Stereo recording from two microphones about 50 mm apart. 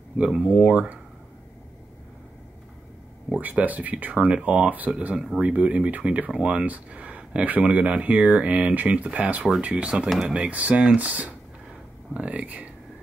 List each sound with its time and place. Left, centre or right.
0.2 s speech: right
3.3 s speech: right
4.9 s speech: centre